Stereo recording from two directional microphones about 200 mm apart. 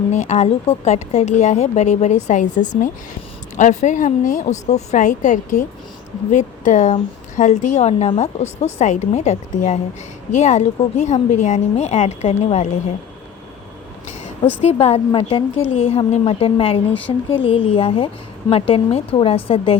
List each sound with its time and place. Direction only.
0.1 s a woman's voice: 35° left (ahead or behind)
14.6 s a woman's voice: 30° left (ahead or behind)